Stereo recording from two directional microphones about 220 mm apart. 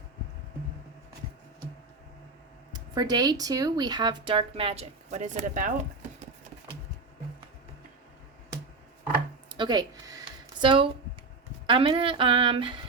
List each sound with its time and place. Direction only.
2.9 s speech: 20° right (ahead or behind); by 5.7 s 35° right (ahead or behind)
9.5 s a sound: 20° right (ahead or behind)
11.6 s speech: 25° right (ahead or behind)